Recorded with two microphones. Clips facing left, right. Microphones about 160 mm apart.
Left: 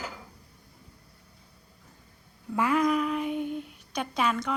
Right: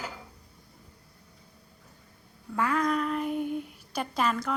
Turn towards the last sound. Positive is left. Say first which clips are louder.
# even
turn(degrees=0)  # may be behind; listen again after turning